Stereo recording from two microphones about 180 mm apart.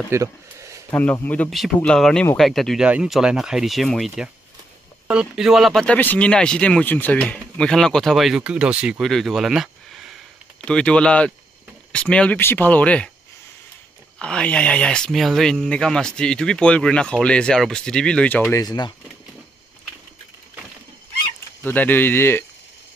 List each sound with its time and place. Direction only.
0.1 s speech: 15° right (ahead or behind)
0.8 s speech: 10° left (ahead or behind)
14.1 s speech: 5° left (ahead or behind)
18.5 s speech: 20° left (ahead or behind)
21.6 s speech: 10° left (ahead or behind)